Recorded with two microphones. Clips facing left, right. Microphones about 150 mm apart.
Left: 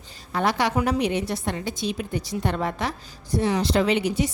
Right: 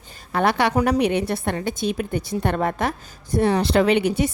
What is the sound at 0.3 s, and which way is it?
A woman's voice, 60° right (ahead or behind).